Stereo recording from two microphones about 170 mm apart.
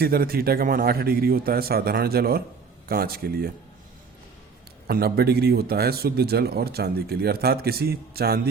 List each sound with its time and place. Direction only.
0.0 s a man's voice: 65° right (ahead or behind)
4.9 s a man's voice: 65° right (ahead or behind)